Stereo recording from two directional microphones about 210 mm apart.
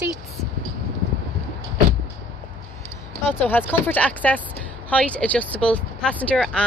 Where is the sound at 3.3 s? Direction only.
10° left (ahead or behind).